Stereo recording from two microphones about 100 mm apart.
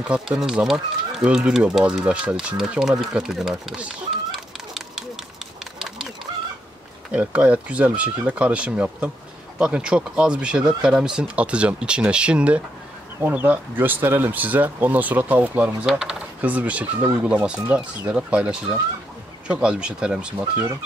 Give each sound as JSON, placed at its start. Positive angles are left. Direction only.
{"t": 0.0, "sound": "speech", "side_deg": -10}
{"t": 4.3, "sound": "chicken", "side_deg": 0}
{"t": 7.1, "sound": "speech", "side_deg": -10}